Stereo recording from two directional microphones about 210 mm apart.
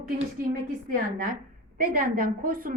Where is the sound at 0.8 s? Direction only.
40° right (ahead or behind).